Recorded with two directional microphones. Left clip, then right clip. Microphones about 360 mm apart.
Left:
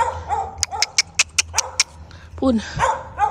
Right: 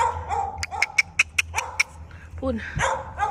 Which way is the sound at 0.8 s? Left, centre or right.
Centre.